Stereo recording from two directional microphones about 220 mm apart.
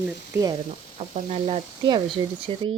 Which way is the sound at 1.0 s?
30° right (ahead or behind).